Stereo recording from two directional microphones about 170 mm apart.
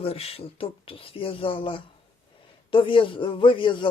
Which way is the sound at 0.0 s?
35° left (ahead or behind).